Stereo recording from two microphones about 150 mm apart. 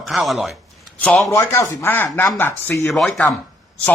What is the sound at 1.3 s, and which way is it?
Speech, 20° left (ahead or behind).